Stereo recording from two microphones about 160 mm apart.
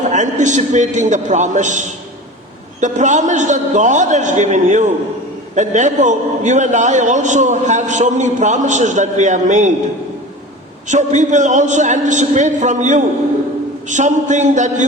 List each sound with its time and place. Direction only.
0.0 s a man's voice: 50° right (ahead or behind)
10.8 s a man's voice: 50° right (ahead or behind)